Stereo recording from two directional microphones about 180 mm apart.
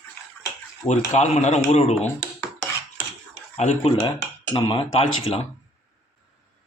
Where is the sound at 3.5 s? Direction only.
35° left (ahead or behind).